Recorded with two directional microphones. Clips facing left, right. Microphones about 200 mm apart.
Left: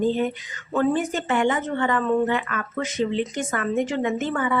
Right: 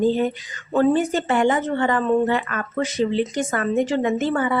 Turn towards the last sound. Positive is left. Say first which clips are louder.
# right 3 dB
turn(degrees=-35)  # may be behind; listen again after turning